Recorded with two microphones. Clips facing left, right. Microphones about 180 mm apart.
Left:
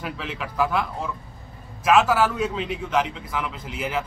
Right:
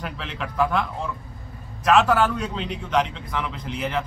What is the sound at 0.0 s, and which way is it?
Speech, centre (ahead or behind).